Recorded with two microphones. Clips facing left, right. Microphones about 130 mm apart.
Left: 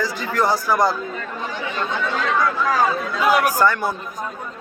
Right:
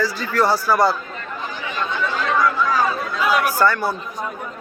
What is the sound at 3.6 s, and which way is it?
Speech, 15° left (ahead or behind).